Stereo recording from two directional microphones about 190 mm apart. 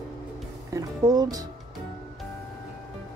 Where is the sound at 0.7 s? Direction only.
20° right (ahead or behind).